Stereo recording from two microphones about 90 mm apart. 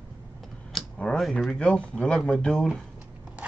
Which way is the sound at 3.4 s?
15° right (ahead or behind).